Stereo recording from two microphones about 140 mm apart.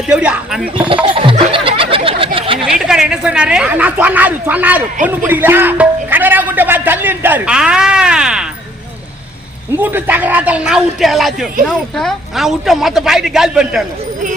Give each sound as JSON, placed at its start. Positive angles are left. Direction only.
{"t": 0.1, "sound": "speech", "side_deg": -10}
{"t": 1.0, "sound": "snicker", "side_deg": -40}
{"t": 2.0, "sound": "a sound", "side_deg": -40}
{"t": 2.7, "sound": "speech", "side_deg": -5}
{"t": 9.7, "sound": "speech", "side_deg": -15}